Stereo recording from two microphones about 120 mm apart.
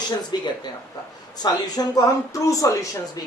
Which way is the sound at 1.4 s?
35° left (ahead or behind).